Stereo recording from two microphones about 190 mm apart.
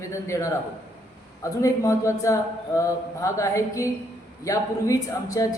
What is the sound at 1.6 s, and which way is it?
A woman's voice, 15° left (ahead or behind).